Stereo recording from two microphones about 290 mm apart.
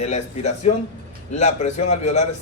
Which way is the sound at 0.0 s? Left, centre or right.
Left.